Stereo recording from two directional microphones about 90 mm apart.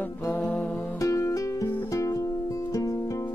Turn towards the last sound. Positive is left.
turn(degrees=40)  # may be behind; listen again after turning